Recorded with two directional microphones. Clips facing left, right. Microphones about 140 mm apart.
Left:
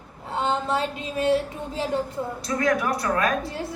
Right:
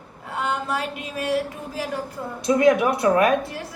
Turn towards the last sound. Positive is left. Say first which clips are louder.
# left 2 dB
turn(degrees=25)  # may be behind; listen again after turning